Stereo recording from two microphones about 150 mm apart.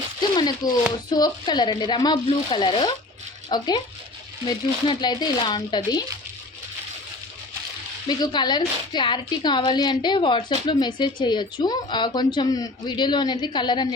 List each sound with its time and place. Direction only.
0.2 s a sound: 30° left (ahead or behind)
1.1 s speech: 30° left (ahead or behind)
8.0 s a woman's voice: 30° left (ahead or behind)